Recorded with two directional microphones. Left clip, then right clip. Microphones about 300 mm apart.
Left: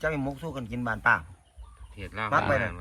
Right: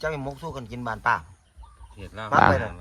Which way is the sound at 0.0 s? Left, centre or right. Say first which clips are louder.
Even; right.